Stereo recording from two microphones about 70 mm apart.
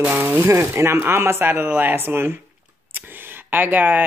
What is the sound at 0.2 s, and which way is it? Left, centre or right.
Speech, right.